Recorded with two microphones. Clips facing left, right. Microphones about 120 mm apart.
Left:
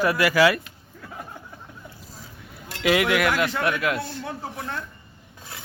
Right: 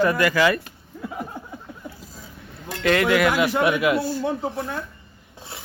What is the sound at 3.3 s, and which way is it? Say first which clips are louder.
Speech: right 4 dB; 15° right (ahead or behind).